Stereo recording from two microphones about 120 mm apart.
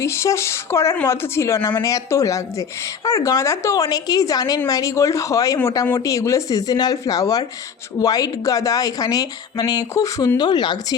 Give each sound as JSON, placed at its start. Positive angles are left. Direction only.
{"t": 0.0, "sound": "speech", "side_deg": 25}